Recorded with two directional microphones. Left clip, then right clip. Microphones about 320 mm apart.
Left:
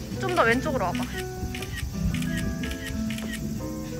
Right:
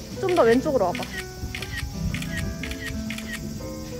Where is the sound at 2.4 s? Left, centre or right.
Right.